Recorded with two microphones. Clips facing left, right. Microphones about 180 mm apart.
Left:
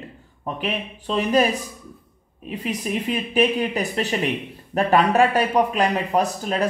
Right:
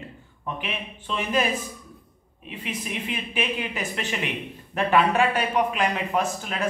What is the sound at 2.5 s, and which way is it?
Speech, 40° left (ahead or behind).